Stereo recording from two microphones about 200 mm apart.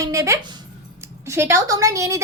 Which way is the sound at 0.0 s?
15° right (ahead or behind).